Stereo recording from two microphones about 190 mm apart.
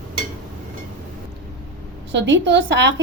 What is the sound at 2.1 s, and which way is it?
Speech, 70° right (ahead or behind).